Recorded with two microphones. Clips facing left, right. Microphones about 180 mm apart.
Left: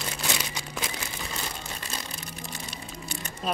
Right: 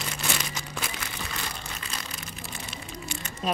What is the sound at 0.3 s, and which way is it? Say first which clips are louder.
Crumpling: even; 15° left (ahead or behind).